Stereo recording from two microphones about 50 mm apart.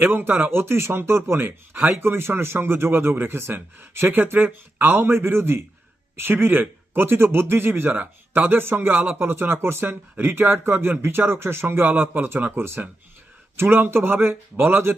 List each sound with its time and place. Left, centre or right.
0.1 s speech: right
0.5 s speech: right
6.2 s speech: right
7.7 s speech: right
8.4 s speech: right
11.9 s speech: right
13.6 s speech: right